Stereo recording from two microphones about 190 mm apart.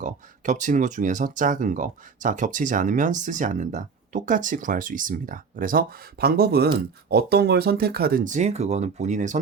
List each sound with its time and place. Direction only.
0.0 s speech: 40° right (ahead or behind)